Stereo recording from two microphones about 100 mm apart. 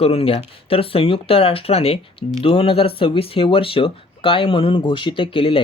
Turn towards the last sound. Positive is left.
turn(degrees=65)  # may be behind; listen again after turning